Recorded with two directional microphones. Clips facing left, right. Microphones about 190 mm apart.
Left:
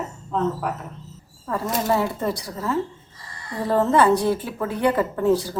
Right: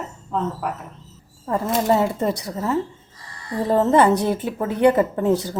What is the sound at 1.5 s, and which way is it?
A woman's voice, 20° right (ahead or behind).